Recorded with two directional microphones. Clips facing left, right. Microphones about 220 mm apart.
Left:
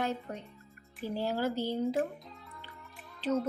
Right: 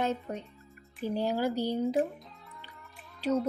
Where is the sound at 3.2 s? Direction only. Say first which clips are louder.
Right 2 dB; 10° right (ahead or behind).